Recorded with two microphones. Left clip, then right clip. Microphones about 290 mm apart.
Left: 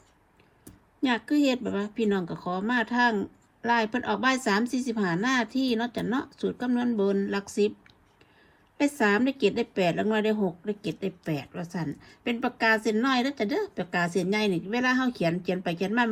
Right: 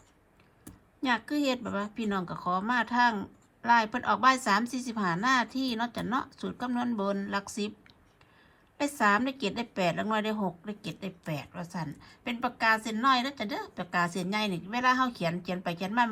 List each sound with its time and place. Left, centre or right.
1.0 s speech: centre
8.8 s speech: centre